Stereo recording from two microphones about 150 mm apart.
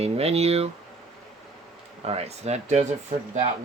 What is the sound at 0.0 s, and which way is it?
Speech, 45° right (ahead or behind).